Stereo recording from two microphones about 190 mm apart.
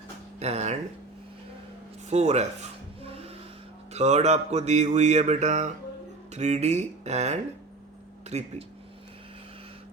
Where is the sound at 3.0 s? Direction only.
30° right (ahead or behind).